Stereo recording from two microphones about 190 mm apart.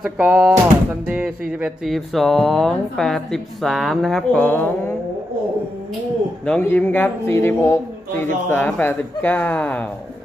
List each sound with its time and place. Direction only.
0.0 s speech: 5° right (ahead or behind); by 4.9 s 10° left (ahead or behind)
6.4 s a man's voice: 5° left (ahead or behind)